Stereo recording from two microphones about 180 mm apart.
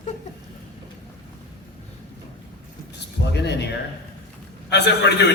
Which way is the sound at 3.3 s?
70° left (ahead or behind).